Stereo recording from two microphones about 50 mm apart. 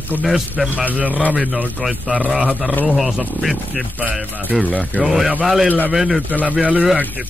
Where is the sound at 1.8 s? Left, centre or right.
Centre.